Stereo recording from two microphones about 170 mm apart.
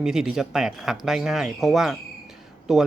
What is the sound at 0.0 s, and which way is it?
Speech, 5° right (ahead or behind).